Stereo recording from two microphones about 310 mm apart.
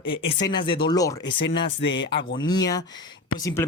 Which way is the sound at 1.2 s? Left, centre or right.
Left.